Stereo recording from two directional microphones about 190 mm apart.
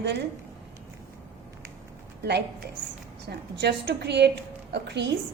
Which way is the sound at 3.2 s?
60° right (ahead or behind).